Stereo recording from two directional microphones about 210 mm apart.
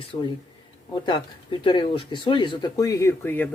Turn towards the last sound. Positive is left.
turn(degrees=10)  # may be behind; listen again after turning